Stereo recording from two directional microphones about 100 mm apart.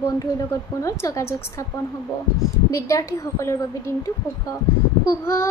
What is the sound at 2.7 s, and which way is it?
A woman's voice, 30° left (ahead or behind).